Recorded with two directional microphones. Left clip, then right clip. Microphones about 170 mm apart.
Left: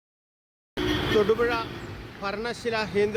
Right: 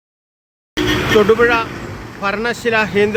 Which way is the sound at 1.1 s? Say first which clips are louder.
Right 12 dB; centre (ahead or behind).